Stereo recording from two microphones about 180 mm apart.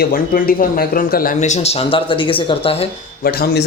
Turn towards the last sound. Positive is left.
turn(degrees=60)  # may be behind; listen again after turning